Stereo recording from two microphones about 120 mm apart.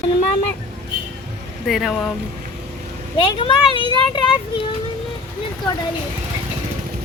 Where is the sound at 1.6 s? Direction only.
Centre (ahead or behind).